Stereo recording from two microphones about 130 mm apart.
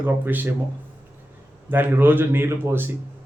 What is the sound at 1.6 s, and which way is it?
Speech, 15° right (ahead or behind).